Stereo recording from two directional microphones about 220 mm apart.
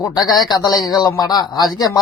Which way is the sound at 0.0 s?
15° left (ahead or behind).